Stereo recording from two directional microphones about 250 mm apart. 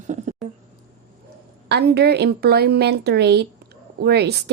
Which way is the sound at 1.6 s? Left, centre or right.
Right.